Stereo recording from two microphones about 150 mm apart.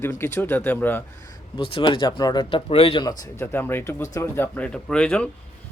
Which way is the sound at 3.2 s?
15° left (ahead or behind).